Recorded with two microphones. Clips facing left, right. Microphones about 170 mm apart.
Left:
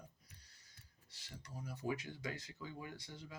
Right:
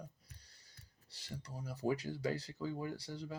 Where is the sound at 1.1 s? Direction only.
35° right (ahead or behind).